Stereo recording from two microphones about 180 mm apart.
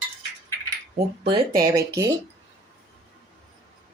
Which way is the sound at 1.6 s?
15° right (ahead or behind).